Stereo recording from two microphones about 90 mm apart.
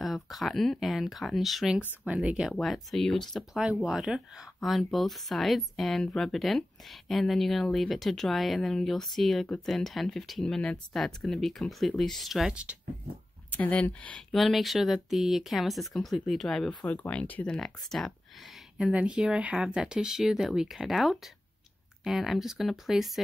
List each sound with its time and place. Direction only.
0.0 s speech: centre (ahead or behind)
2.5 s speech: centre (ahead or behind)
3.5 s speech: 5° right (ahead or behind)
13.5 s speech: 15° left (ahead or behind)
14.3 s speech: centre (ahead or behind)
17.6 s speech: 5° left (ahead or behind)
18.8 s speech: 10° right (ahead or behind)